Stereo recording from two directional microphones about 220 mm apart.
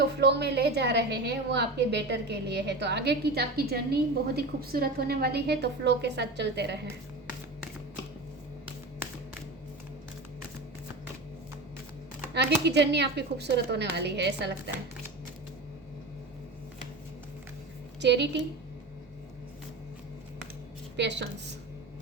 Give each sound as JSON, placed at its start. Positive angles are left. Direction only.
{"t": 0.2, "sound": "a woman's voice", "side_deg": -50}
{"t": 12.3, "sound": "a woman's voice", "side_deg": -50}
{"t": 18.0, "sound": "a woman's voice", "side_deg": -50}
{"t": 20.9, "sound": "speech", "side_deg": -50}